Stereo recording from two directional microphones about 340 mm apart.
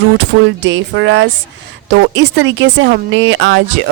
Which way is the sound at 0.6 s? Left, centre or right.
Right.